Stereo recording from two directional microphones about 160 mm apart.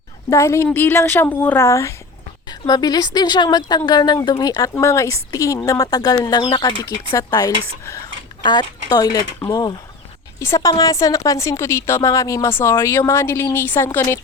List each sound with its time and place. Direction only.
0.3 s a woman's voice: 15° left (ahead or behind)